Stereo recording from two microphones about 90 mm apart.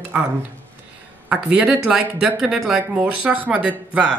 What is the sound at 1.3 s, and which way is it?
Speech, 15° right (ahead or behind).